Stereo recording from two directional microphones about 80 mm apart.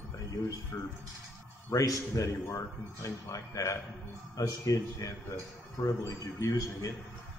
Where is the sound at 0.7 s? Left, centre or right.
Left.